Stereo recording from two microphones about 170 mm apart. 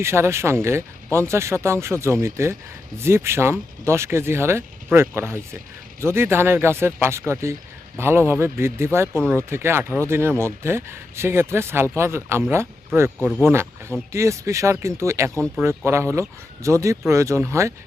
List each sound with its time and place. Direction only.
0.0 s speech: 15° right (ahead or behind)